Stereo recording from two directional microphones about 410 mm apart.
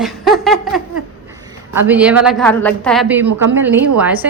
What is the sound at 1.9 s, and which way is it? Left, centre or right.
A woman's voice, centre.